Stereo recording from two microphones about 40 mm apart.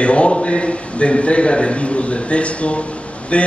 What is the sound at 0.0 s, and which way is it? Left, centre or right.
A man's voice, left.